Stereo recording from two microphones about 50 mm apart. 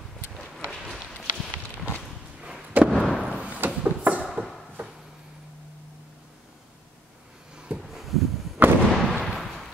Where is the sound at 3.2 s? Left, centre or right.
Right.